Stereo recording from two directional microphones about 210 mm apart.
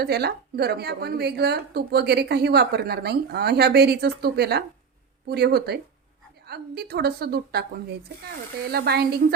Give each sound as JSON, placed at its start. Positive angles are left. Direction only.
{"t": 0.0, "sound": "a woman's voice", "side_deg": -50}
{"t": 8.7, "sound": "a woman's voice", "side_deg": -50}